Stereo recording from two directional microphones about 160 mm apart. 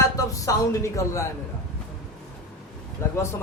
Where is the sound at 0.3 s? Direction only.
20° left (ahead or behind).